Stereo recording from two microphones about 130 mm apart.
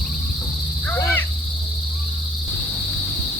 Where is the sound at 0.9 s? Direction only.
15° left (ahead or behind).